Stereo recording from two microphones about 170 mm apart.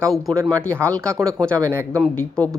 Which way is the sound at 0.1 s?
Centre (ahead or behind).